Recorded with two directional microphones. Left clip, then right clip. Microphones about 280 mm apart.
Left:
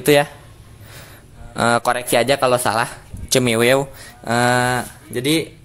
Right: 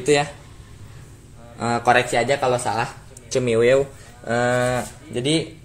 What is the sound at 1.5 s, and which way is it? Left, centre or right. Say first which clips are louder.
Speech: left 1 dB; left.